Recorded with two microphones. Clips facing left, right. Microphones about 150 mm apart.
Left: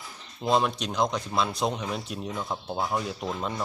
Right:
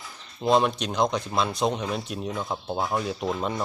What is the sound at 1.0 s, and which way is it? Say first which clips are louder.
Speech: right 2 dB; 15° right (ahead or behind).